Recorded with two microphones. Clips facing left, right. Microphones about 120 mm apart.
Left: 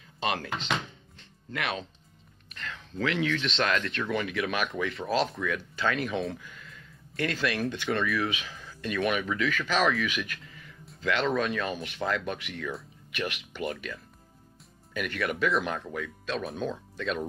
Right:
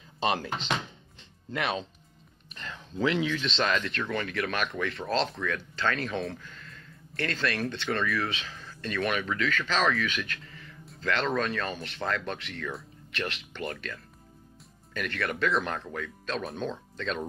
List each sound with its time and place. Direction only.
0.5 s speech: 30° right (ahead or behind)
1.1 s music: 25° right (ahead or behind)
2.5 s a sound: 25° right (ahead or behind)
3.3 s speech: 5° right (ahead or behind); by 7.6 s 10° left (ahead or behind)
7.9 s speech: centre (ahead or behind)